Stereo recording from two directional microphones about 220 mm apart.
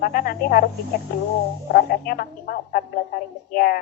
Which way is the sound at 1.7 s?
45° left (ahead or behind).